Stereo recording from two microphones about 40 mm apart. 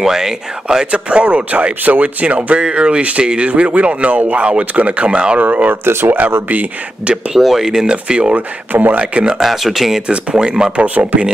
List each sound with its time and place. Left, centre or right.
0.0 s speech: centre
0.9 s speech: right
5.4 s speech: right
5.9 s speech: right
6.5 s speech: right
7.3 s speech: centre
7.8 s speech: right
9.4 s speech: centre
10.0 s speech: right
10.8 s speech: right